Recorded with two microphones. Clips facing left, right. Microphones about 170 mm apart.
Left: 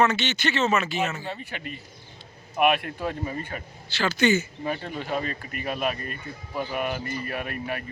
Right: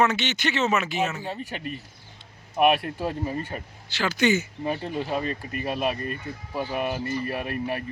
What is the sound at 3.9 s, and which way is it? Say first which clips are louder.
Speech: left 1 dB; 15° right (ahead or behind).